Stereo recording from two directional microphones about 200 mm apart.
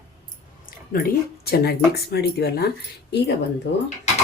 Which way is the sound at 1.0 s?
50° left (ahead or behind).